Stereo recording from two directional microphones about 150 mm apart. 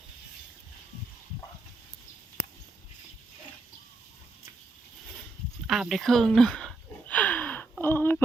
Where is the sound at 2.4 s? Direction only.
90° left.